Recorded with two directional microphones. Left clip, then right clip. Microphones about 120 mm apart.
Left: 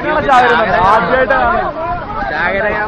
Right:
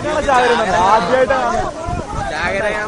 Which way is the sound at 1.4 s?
50° right (ahead or behind).